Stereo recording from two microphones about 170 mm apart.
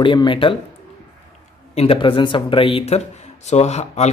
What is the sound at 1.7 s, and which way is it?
A man's voice, 35° left (ahead or behind).